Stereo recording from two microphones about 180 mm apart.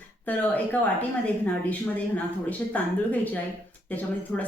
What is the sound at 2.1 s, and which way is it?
A woman's voice, 10° left (ahead or behind).